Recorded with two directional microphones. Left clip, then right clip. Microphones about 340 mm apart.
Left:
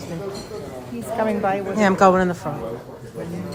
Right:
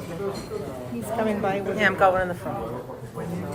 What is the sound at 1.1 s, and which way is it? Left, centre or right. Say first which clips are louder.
Speech: left 4 dB; left.